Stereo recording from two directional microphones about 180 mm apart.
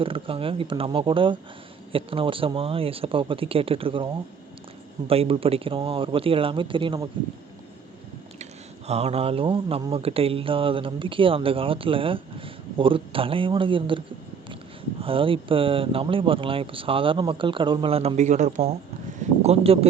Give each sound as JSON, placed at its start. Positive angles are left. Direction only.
{"t": 0.0, "sound": "speech", "side_deg": -30}
{"t": 8.9, "sound": "speech", "side_deg": -35}
{"t": 15.0, "sound": "speech", "side_deg": -30}